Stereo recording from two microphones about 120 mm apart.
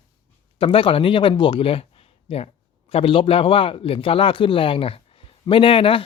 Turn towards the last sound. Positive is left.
turn(degrees=45)  # may be behind; listen again after turning